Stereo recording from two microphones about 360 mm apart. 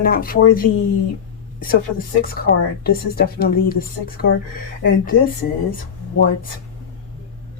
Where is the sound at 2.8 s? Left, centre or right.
Left.